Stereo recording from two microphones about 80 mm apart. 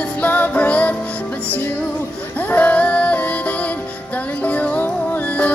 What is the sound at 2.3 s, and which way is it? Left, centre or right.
Music, left.